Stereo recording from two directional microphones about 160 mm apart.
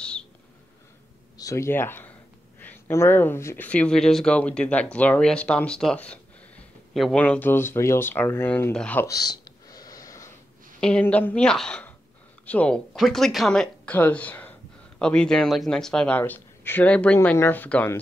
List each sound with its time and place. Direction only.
1.4 s speech: 20° left (ahead or behind)
9.0 s a sound: 25° left (ahead or behind)
10.8 s speech: 5° left (ahead or behind)